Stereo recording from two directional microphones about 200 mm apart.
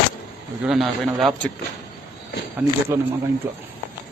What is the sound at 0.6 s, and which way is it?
Speech, centre (ahead or behind).